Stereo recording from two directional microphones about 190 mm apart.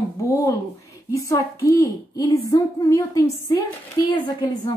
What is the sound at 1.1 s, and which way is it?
A woman's voice, 15° left (ahead or behind).